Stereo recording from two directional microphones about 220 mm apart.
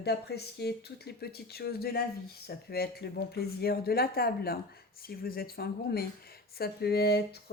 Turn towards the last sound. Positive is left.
turn(degrees=45)  # may be behind; listen again after turning